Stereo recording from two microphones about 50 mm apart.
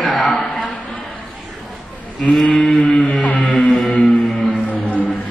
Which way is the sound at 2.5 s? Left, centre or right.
Left.